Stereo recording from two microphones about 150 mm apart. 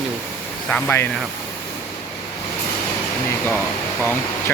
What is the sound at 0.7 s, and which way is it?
Speech, 10° left (ahead or behind).